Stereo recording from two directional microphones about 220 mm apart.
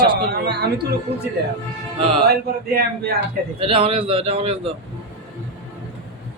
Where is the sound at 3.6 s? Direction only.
25° right (ahead or behind).